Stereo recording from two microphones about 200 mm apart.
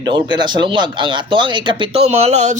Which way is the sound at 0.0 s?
20° right (ahead or behind).